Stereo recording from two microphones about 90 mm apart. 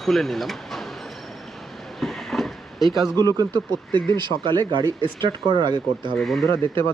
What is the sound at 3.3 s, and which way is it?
Speech, 50° right (ahead or behind).